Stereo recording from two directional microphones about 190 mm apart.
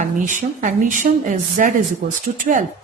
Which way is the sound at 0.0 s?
40° right (ahead or behind).